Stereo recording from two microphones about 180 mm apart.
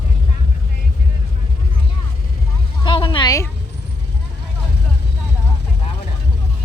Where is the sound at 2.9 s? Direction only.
25° left (ahead or behind).